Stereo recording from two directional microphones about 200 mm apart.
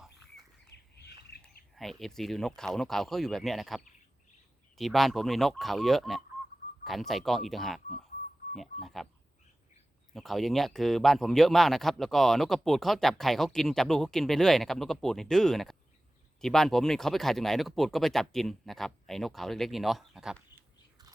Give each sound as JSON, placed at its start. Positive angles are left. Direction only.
{"t": 0.7, "sound": "a sound", "side_deg": 55}
{"t": 1.7, "sound": "speech", "side_deg": 0}
{"t": 10.2, "sound": "speech", "side_deg": 0}